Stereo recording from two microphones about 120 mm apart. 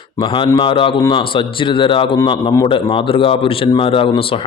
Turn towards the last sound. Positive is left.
turn(degrees=50)  # may be behind; listen again after turning